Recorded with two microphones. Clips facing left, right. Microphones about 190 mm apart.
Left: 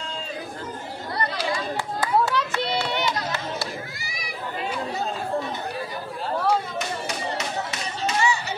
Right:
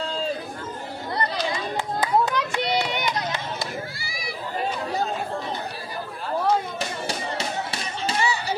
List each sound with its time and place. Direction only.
2.0 s a sound: 15° right (ahead or behind)
4.0 s chatter: 30° right (ahead or behind)
7.1 s music: 30° right (ahead or behind)